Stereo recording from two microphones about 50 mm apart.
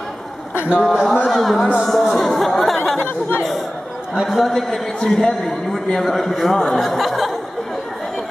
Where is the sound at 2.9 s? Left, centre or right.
Left.